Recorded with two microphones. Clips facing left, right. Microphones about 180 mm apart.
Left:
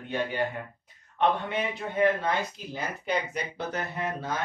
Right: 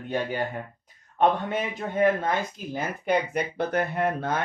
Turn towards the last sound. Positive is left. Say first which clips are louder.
# right 6 dB
turn(degrees=-55)  # may be behind; listen again after turning